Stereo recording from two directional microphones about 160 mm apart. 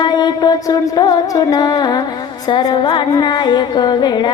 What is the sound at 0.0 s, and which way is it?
Music, 25° left (ahead or behind).